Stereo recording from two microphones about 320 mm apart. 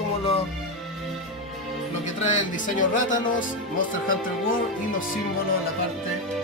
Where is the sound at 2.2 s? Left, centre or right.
Left.